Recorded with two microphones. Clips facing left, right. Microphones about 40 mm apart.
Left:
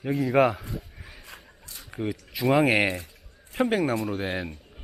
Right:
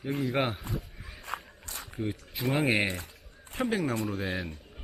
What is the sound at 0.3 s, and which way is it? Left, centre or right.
Speech, left.